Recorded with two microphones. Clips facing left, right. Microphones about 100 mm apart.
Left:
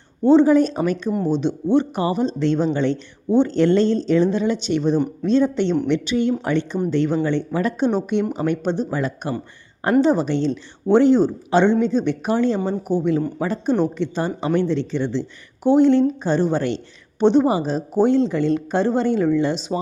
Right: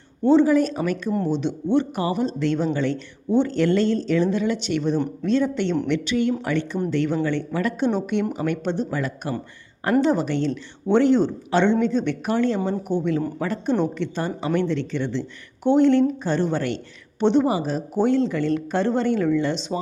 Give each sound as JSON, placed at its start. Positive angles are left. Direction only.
{"t": 0.4, "sound": "a woman's voice", "side_deg": 30}